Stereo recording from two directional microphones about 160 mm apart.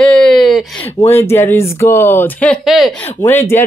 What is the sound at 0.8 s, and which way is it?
Speech, 15° left (ahead or behind).